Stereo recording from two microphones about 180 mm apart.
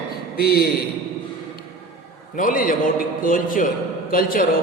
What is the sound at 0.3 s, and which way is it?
Speech, 60° left (ahead or behind).